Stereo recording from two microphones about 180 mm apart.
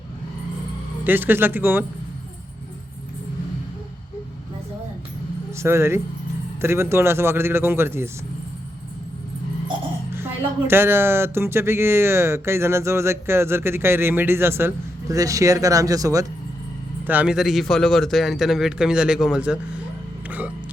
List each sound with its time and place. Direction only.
1.0 s speech: 10° right (ahead or behind)
5.5 s speech: 15° right (ahead or behind)
10.2 s speech: 15° right (ahead or behind)
17.1 s a man's voice: 5° right (ahead or behind)